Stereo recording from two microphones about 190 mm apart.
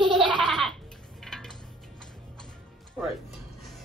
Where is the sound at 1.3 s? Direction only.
5° left (ahead or behind).